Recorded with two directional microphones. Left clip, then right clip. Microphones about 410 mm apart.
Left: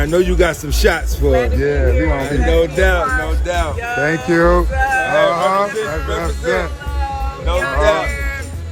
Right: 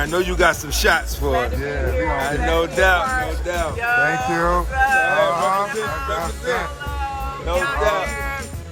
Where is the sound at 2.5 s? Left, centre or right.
Centre.